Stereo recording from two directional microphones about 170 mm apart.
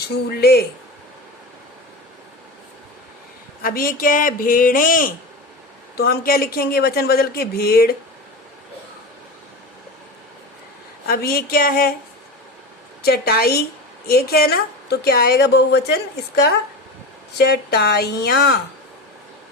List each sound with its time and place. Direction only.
0.0 s a woman's voice: 70° left (ahead or behind)
3.6 s speech: 55° left (ahead or behind)
11.1 s speech: 65° left (ahead or behind)
13.0 s a woman's voice: 70° left (ahead or behind)